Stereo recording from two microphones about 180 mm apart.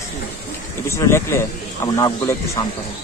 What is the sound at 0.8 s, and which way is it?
A man's voice, 15° left (ahead or behind).